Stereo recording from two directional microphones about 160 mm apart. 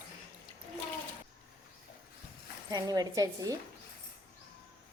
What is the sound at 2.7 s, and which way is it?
Speech, 25° right (ahead or behind).